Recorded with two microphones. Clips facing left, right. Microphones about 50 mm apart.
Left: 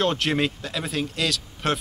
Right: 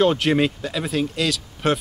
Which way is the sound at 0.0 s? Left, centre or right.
Centre.